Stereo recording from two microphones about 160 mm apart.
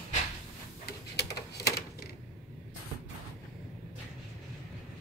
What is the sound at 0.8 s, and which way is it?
Tick-tock, 90° left.